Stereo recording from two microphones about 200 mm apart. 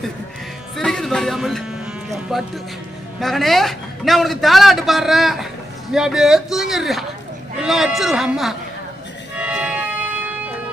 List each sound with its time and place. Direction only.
0.8 s a man's voice: centre (ahead or behind)
9.4 s music: 5° right (ahead or behind)